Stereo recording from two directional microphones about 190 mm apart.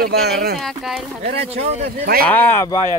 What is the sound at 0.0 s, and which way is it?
Speech, 55° right (ahead or behind).